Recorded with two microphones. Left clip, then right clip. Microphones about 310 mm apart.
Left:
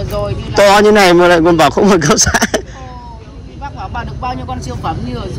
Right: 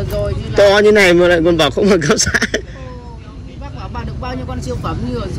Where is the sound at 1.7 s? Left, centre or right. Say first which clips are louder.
Left 3 dB; centre.